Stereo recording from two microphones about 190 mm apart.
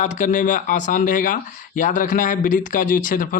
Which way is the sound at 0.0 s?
40° left (ahead or behind).